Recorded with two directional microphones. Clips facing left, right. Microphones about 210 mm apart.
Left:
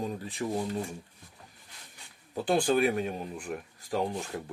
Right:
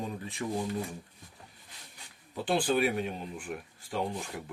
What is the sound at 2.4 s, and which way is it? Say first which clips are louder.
Speech: left 2 dB; 45° left (ahead or behind).